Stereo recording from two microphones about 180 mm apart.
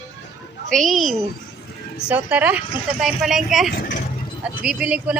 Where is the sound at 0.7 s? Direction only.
Centre (ahead or behind).